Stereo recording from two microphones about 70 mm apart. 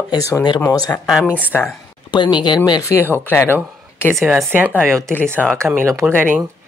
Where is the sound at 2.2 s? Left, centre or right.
Left.